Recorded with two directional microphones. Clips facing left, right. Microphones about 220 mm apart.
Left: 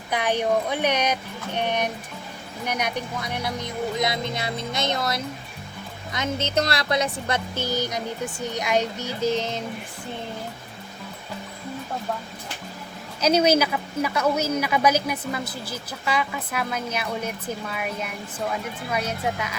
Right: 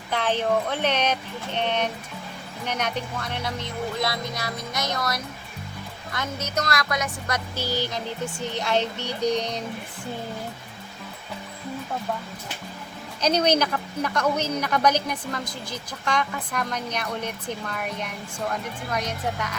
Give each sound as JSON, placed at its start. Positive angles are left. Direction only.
{"t": 0.1, "sound": "a woman's voice", "side_deg": 15}
{"t": 9.2, "sound": "music", "side_deg": 0}
{"t": 13.2, "sound": "a woman's voice", "side_deg": 10}